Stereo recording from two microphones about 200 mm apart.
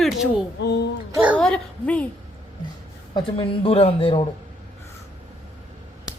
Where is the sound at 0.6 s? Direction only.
60° left (ahead or behind).